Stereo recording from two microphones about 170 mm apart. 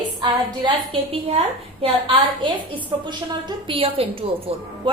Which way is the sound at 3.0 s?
25° right (ahead or behind).